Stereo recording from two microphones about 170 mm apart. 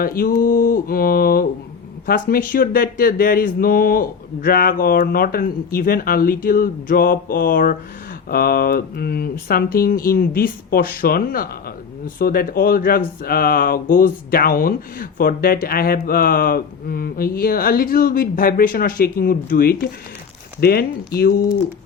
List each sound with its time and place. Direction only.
0.0 s speech: 60° left (ahead or behind)